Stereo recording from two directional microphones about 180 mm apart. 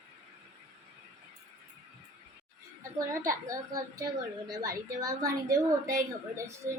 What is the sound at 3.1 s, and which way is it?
A woman's voice, 15° right (ahead or behind).